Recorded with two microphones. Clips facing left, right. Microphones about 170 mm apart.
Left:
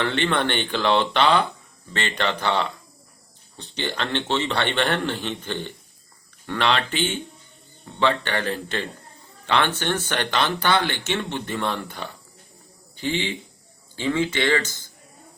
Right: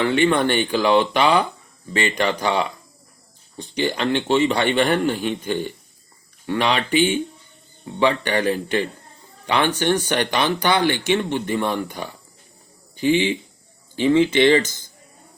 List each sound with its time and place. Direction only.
0.0 s speech: 10° right (ahead or behind)